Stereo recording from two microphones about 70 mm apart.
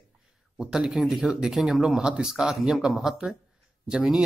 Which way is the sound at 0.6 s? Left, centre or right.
Centre.